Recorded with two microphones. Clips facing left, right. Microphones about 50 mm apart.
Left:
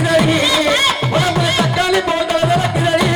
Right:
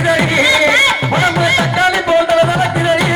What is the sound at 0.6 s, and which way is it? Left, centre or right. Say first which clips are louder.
Music: right 4 dB; right.